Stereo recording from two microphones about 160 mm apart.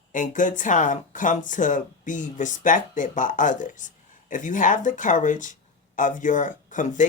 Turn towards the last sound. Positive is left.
turn(degrees=50)  # may be behind; listen again after turning